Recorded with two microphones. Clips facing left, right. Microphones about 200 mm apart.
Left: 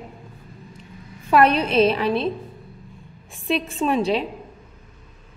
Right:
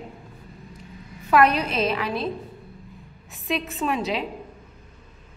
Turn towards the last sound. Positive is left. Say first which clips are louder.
# left 5 dB
turn(degrees=30)  # may be behind; listen again after turning